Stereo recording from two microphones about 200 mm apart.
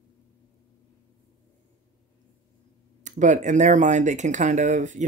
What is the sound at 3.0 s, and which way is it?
Speech, 40° right (ahead or behind).